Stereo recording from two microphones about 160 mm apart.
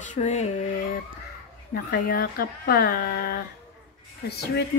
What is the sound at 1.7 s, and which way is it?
Speech, 70° left (ahead or behind).